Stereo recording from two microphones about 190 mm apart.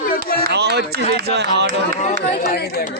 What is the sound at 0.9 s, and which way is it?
Speech, 55° right (ahead or behind).